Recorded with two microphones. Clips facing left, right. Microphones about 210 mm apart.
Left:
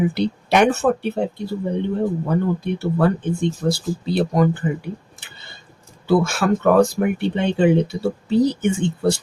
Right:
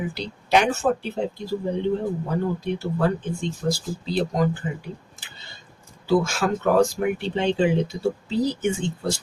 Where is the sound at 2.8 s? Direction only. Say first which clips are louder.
Left 6 dB; 65° left (ahead or behind).